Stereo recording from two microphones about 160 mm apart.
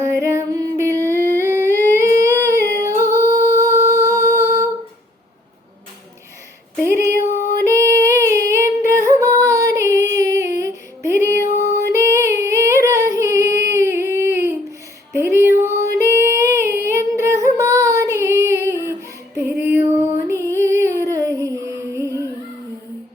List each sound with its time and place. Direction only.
0.0 s humming: 20° right (ahead or behind)
6.7 s female singing: 15° right (ahead or behind)
7.6 s music: 20° right (ahead or behind)
11.9 s singing: 15° right (ahead or behind)
15.1 s female singing: 15° right (ahead or behind)
19.5 s music: 15° right (ahead or behind)